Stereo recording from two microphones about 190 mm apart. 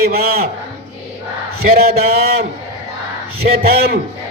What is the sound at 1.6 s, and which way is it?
A man's voice, 55° right (ahead or behind).